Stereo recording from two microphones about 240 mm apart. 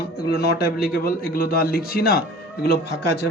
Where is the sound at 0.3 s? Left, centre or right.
Left.